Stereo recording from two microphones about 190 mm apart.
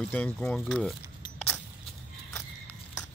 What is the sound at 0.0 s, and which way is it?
Speech, 5° left (ahead or behind).